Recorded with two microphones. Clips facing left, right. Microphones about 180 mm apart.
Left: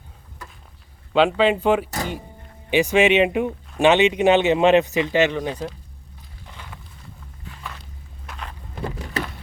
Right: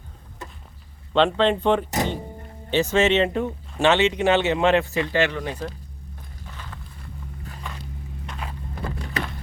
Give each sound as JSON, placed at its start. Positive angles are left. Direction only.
{"t": 0.4, "sound": "a sound", "side_deg": -25}
{"t": 1.1, "sound": "speech", "side_deg": 5}
{"t": 1.9, "sound": "music", "side_deg": -20}
{"t": 2.6, "sound": "speech", "side_deg": 15}
{"t": 6.5, "sound": "walk", "side_deg": 15}
{"t": 8.3, "sound": "vehicle", "side_deg": -5}